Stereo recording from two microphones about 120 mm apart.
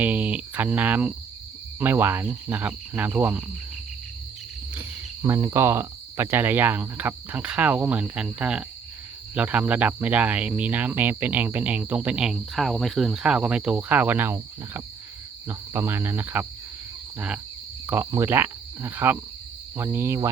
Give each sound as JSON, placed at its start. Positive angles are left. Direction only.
{"t": 0.0, "sound": "speech", "side_deg": -15}
{"t": 5.2, "sound": "speech", "side_deg": -30}
{"t": 15.4, "sound": "cricket", "side_deg": -20}
{"t": 17.2, "sound": "speech", "side_deg": -10}
{"t": 19.7, "sound": "cricket", "side_deg": -20}